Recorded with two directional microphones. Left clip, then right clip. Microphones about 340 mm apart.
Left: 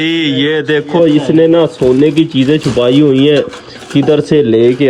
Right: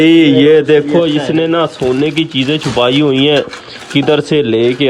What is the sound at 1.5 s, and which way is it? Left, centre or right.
Speech, centre.